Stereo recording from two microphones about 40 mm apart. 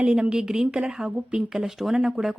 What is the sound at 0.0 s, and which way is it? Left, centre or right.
A woman's voice, right.